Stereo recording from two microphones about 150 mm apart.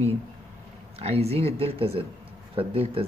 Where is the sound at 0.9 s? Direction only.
45° right (ahead or behind).